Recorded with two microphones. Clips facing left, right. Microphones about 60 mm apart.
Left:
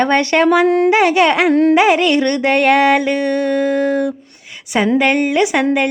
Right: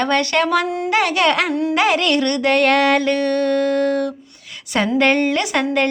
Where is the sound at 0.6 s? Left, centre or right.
Left.